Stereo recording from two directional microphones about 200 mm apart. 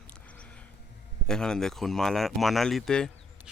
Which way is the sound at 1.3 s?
5° left (ahead or behind).